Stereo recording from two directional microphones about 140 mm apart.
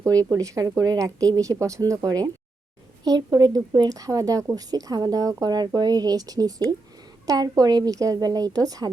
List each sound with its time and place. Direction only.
0.0 s speech: 25° right (ahead or behind)